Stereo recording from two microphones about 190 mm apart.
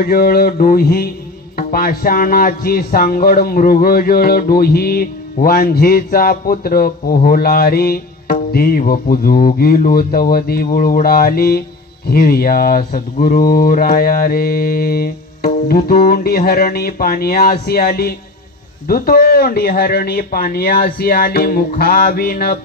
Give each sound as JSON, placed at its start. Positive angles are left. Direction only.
{"t": 0.0, "sound": "music", "side_deg": 50}